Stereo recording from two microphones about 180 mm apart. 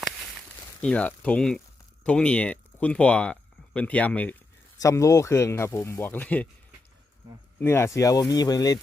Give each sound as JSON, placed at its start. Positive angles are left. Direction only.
{"t": 0.8, "sound": "speech", "side_deg": 5}
{"t": 7.6, "sound": "speech", "side_deg": 15}